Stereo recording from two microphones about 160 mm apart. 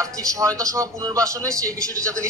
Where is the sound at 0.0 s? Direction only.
20° right (ahead or behind).